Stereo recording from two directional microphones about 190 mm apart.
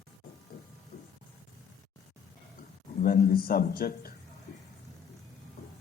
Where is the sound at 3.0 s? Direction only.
50° left (ahead or behind).